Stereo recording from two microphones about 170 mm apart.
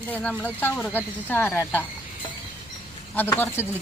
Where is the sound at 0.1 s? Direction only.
10° left (ahead or behind).